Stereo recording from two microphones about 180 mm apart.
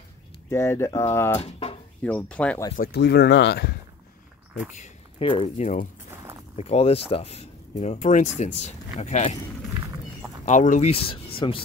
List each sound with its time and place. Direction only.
0.5 s speech: 15° left (ahead or behind)
1.4 s speech: 35° left (ahead or behind)
2.0 s speech: 5° left (ahead or behind)
2.7 s speech: 60° left (ahead or behind)
5.2 s speech: 30° left (ahead or behind)
10.4 s speech: 45° left (ahead or behind)